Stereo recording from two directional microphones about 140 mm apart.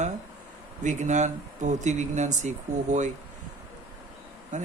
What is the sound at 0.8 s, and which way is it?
Speech, 60° right (ahead or behind).